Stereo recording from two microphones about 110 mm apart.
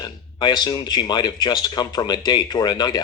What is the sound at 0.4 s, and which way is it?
Speech, 40° left (ahead or behind).